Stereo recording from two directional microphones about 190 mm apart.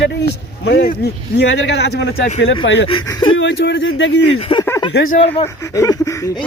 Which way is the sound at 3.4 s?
70° left (ahead or behind).